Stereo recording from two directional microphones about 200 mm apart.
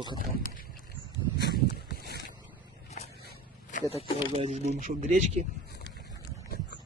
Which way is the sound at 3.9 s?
30° right (ahead or behind).